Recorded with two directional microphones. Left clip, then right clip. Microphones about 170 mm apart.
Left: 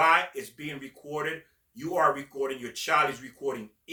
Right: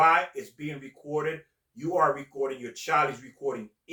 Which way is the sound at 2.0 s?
20° left (ahead or behind).